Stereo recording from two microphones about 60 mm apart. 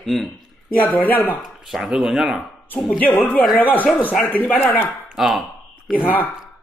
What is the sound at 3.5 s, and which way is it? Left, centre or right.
A man's voice, left.